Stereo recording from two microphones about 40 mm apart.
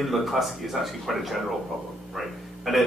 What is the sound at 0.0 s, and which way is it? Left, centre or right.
Speech, centre.